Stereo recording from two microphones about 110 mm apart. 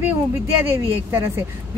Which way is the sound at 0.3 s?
25° right (ahead or behind).